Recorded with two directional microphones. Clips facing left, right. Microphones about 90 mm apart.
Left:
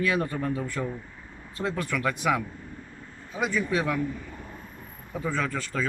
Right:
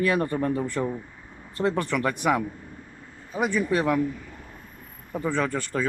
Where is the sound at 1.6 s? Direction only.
50° right (ahead or behind).